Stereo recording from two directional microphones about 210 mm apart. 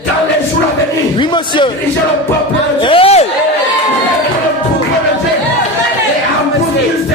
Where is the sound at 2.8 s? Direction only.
25° left (ahead or behind).